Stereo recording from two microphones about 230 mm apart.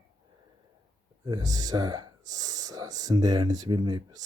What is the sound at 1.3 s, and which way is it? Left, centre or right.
Speech, centre.